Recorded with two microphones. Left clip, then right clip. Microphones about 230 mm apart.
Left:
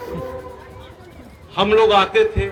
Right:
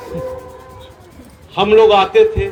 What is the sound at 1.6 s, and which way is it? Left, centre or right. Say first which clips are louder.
Speech: right 4 dB; left.